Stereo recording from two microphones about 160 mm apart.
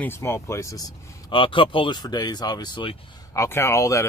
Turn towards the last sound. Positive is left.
turn(degrees=20)  # may be behind; listen again after turning